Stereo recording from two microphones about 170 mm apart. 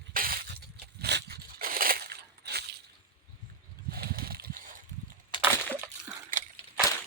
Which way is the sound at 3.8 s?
65° right (ahead or behind).